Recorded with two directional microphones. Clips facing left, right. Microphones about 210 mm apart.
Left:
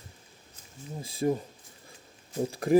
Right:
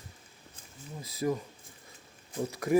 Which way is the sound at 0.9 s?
25° left (ahead or behind).